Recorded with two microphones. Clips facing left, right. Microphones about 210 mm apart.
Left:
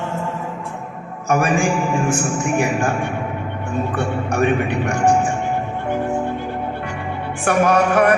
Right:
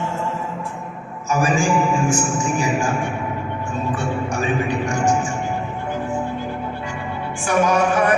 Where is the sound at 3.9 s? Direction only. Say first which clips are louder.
Left 4 dB; 60° left (ahead or behind).